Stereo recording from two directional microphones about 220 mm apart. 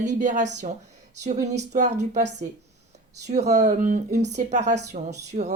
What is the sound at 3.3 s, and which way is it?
Speech, 30° right (ahead or behind).